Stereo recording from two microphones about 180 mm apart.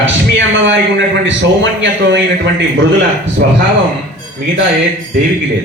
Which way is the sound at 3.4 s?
60° right (ahead or behind).